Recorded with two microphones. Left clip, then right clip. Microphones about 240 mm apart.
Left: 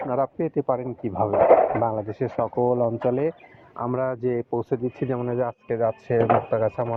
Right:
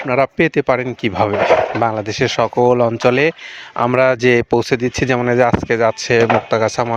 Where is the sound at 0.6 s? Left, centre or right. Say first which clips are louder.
Right 9 dB; right.